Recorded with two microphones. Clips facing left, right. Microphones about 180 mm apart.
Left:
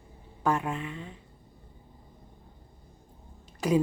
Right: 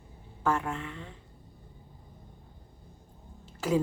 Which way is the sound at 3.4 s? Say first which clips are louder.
Left 2 dB; 15° left (ahead or behind).